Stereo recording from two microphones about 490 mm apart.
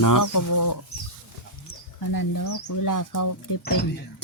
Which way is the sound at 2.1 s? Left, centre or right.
Left.